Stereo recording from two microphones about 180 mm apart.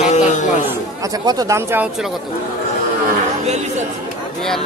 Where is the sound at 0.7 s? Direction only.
20° right (ahead or behind).